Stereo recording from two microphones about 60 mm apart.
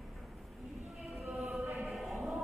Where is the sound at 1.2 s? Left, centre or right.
Centre.